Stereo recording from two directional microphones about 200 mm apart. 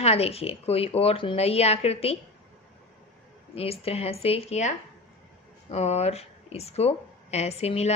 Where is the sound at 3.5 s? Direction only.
30° left (ahead or behind).